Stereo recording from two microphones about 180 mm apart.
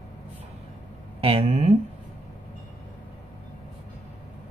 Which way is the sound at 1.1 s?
35° right (ahead or behind).